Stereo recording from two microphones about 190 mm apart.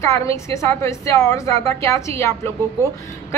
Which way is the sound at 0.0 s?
15° left (ahead or behind).